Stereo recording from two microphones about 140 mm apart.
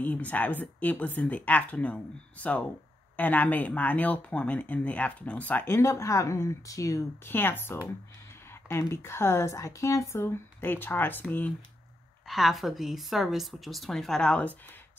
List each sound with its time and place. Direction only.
0.0 s speech: 10° left (ahead or behind)
12.3 s a woman's voice: centre (ahead or behind)